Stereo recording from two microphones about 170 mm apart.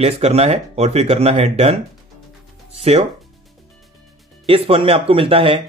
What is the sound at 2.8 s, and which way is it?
Speech, 35° right (ahead or behind).